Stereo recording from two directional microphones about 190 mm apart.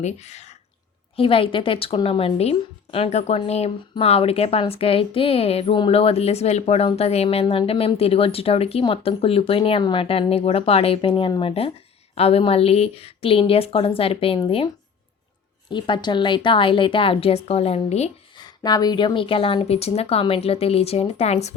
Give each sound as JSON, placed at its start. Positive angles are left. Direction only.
{"t": 0.0, "sound": "a woman's voice", "side_deg": 35}
{"t": 15.7, "sound": "a woman's voice", "side_deg": 25}
{"t": 18.3, "sound": "a woman's voice", "side_deg": 20}